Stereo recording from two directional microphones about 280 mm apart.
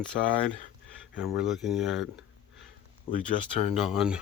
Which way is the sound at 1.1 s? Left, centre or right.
Centre.